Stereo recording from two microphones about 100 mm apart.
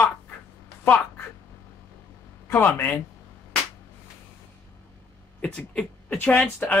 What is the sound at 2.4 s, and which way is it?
Speech, 20° left (ahead or behind).